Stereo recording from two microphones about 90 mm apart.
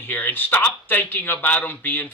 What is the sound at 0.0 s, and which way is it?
A man's voice, 20° left (ahead or behind).